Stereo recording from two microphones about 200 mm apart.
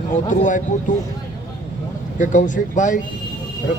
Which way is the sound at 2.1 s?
40° left (ahead or behind).